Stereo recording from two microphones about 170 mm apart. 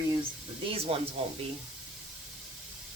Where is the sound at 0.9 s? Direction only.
35° right (ahead or behind).